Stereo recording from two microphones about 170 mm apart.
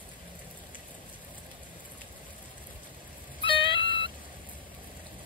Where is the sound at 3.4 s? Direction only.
30° left (ahead or behind).